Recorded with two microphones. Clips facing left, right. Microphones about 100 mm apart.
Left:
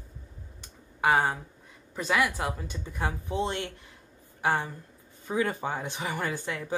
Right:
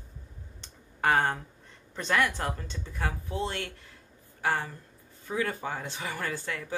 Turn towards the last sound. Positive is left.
turn(degrees=15)  # may be behind; listen again after turning